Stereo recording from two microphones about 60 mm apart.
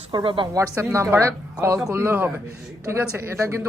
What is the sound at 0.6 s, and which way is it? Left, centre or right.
Speech, right.